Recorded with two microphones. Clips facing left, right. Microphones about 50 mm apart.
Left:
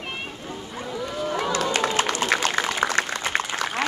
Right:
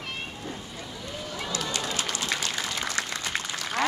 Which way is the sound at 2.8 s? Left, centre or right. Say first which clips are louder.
Left 8 dB; left.